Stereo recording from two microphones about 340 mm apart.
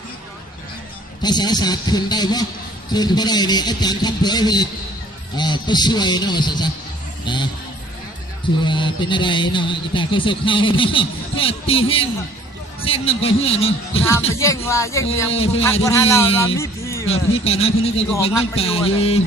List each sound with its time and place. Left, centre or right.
1.2 s speech: centre
8.6 s speech: centre